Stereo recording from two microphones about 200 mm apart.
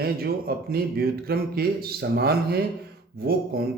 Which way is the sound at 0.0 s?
50° right (ahead or behind).